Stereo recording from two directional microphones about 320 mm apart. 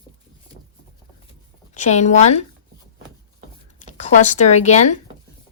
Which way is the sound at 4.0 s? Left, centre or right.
Left.